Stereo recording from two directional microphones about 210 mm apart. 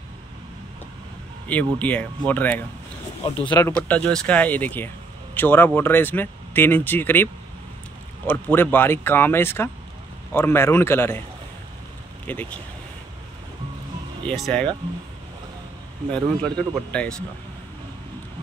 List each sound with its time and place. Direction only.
1.5 s speech: 5° left (ahead or behind)
3.3 s speech: 20° left (ahead or behind)
3.7 s speech: 5° left (ahead or behind)
8.3 s speech: 10° left (ahead or behind)
12.3 s speech: 10° left (ahead or behind)
14.2 s speech: centre (ahead or behind)
16.1 s speech: 5° left (ahead or behind)